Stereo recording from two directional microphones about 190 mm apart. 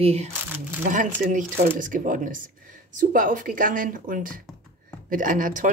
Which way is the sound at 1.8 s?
45° right (ahead or behind).